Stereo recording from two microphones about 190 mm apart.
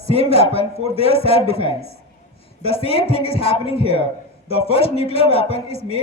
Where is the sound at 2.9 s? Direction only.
30° left (ahead or behind).